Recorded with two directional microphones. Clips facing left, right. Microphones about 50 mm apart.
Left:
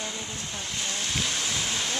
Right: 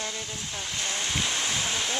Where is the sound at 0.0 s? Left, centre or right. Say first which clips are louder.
Even; centre.